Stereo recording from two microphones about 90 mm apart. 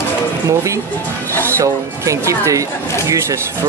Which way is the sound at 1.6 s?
35° right (ahead or behind).